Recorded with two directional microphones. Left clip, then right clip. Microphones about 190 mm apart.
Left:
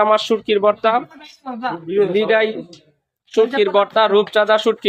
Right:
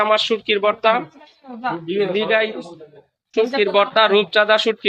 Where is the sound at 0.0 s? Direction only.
20° left (ahead or behind).